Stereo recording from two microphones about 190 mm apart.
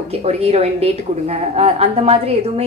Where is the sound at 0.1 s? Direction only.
35° right (ahead or behind).